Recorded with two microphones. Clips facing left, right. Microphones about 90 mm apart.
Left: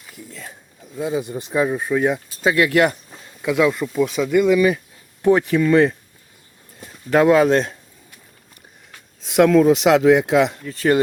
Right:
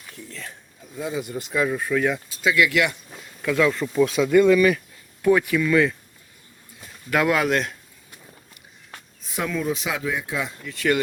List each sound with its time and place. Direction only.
0.1 s speech: 10° left (ahead or behind)
0.9 s speech: 25° left (ahead or behind)
2.3 s speech: 40° left (ahead or behind)
3.1 s a sound: 15° left (ahead or behind)
3.9 s speech: 5° left (ahead or behind); by 4.8 s 20° left (ahead or behind)
5.2 s speech: 30° left (ahead or behind)
7.1 s speech: 30° left (ahead or behind)
9.2 s speech: 85° left
10.6 s speech: 35° left (ahead or behind)